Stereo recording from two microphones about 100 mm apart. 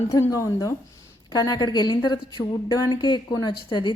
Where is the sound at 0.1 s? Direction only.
30° left (ahead or behind).